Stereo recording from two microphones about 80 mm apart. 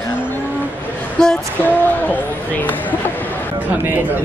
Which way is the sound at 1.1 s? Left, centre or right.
Centre.